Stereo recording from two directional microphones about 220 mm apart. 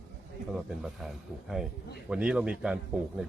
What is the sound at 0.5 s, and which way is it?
Speech, centre (ahead or behind).